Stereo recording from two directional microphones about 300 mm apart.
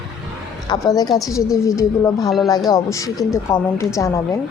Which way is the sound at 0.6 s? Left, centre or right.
Centre.